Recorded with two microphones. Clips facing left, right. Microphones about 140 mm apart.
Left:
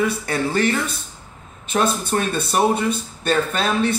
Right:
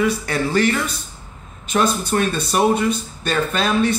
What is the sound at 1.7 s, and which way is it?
Speech, 35° left (ahead or behind).